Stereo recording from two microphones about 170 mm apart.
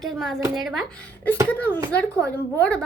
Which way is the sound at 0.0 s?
Centre (ahead or behind).